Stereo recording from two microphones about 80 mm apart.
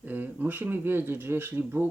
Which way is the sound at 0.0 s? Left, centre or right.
Right.